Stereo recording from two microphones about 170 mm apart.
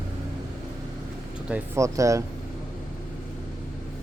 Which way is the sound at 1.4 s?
10° right (ahead or behind).